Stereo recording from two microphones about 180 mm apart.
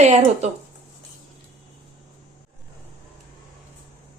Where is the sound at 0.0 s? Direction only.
40° right (ahead or behind).